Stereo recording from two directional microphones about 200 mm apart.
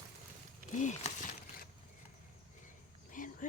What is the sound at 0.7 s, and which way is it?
Speech, 35° left (ahead or behind).